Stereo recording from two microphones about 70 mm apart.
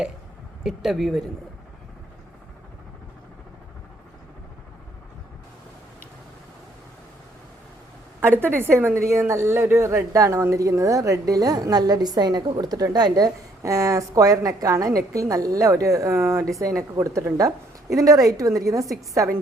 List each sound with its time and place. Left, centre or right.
0.6 s speech: centre
8.4 s a woman's voice: right